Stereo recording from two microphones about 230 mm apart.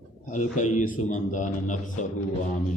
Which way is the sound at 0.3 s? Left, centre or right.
Left.